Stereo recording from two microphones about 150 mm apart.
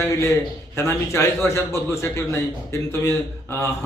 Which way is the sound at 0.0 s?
20° left (ahead or behind).